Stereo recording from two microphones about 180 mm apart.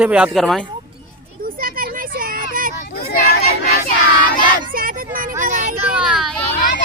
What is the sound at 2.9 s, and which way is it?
Chatter, 55° left (ahead or behind).